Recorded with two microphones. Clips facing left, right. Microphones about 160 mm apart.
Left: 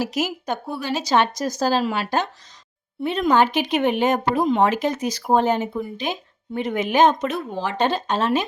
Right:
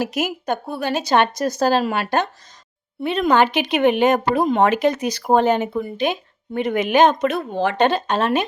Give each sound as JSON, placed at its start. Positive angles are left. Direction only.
{"t": 0.0, "sound": "a woman's voice", "side_deg": -55}
{"t": 4.4, "sound": "speech", "side_deg": -60}